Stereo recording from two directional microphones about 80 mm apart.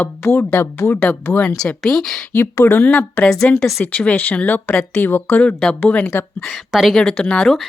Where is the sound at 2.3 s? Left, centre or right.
Left.